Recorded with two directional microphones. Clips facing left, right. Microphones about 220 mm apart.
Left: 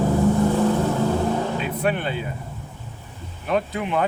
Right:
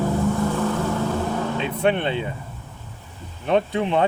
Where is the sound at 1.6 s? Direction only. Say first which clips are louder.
Right 2 dB; 25° right (ahead or behind).